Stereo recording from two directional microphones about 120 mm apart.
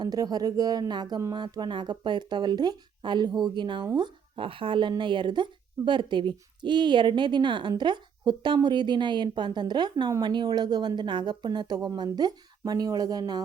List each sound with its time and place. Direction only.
0.0 s a woman's voice: 35° right (ahead or behind)